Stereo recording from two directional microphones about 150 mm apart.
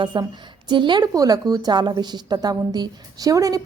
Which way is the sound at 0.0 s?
30° right (ahead or behind).